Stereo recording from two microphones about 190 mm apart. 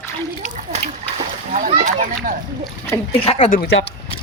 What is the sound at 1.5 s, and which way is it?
Speech, 40° right (ahead or behind).